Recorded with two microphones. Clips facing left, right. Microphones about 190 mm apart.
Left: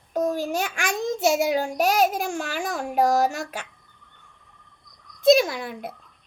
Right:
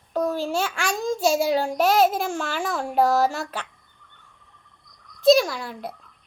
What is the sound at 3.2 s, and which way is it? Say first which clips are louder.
Speech: right 1 dB; 45° left (ahead or behind).